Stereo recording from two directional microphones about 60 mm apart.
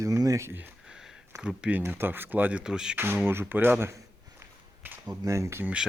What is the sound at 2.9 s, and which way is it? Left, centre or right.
Speech, right.